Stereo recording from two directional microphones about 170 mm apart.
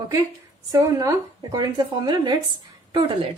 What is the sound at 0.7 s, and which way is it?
Speech, 20° right (ahead or behind).